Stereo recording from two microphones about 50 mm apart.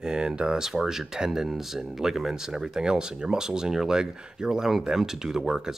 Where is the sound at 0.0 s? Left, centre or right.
Centre.